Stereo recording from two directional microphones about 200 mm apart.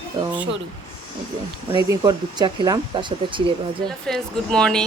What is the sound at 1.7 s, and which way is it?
Speech, 20° right (ahead or behind).